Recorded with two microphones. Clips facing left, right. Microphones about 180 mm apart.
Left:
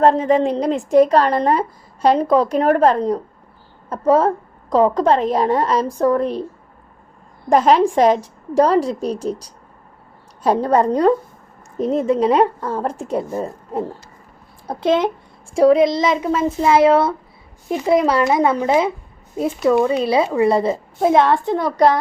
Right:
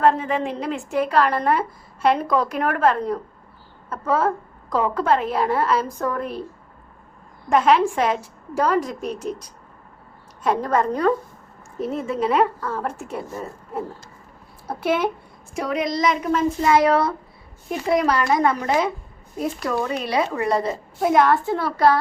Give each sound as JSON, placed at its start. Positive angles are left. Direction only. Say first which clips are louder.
{"t": 0.0, "sound": "a woman's voice", "louder": "left 6 dB", "side_deg": 35}
{"t": 7.5, "sound": "a woman's voice", "louder": "left 4 dB", "side_deg": 35}
{"t": 15.5, "sound": "a woman's voice", "louder": "left 11 dB", "side_deg": 30}